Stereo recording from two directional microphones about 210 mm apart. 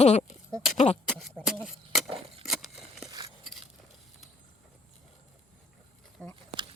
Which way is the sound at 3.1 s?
20° right (ahead or behind).